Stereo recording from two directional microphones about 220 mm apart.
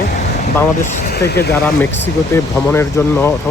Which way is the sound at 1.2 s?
50° left (ahead or behind).